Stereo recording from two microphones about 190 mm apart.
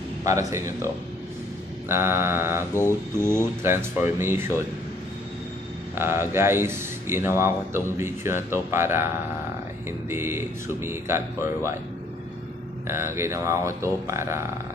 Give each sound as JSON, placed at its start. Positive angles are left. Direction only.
{"t": 0.2, "sound": "a man's voice", "side_deg": -15}
{"t": 1.9, "sound": "a man's voice", "side_deg": -15}
{"t": 2.7, "sound": "mantra", "side_deg": 15}
{"t": 3.2, "sound": "a man's voice", "side_deg": -15}
{"t": 5.9, "sound": "a man's voice", "side_deg": -15}
{"t": 12.8, "sound": "a man's voice", "side_deg": -15}